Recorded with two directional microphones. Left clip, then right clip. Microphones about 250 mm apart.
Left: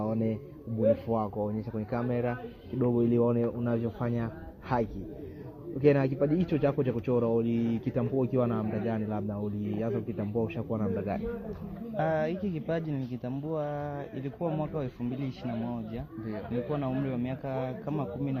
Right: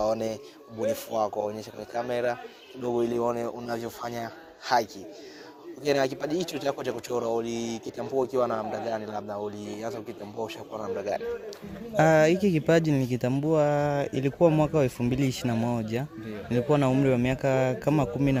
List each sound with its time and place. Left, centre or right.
0.0 s a sound: right
1.1 s speech: right
11.9 s speech: right